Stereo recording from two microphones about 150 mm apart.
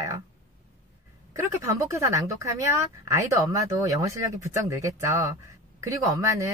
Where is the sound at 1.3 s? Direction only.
20° right (ahead or behind).